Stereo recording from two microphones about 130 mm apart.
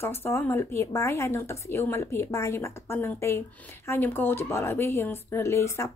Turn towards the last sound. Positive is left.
turn(degrees=20)  # may be behind; listen again after turning